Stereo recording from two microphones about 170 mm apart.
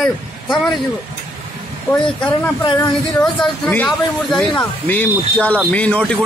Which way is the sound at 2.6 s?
25° left (ahead or behind).